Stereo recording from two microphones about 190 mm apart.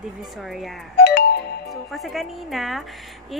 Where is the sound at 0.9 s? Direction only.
60° left (ahead or behind).